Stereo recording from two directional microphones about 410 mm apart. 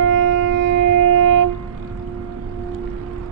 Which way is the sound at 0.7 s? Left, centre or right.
Right.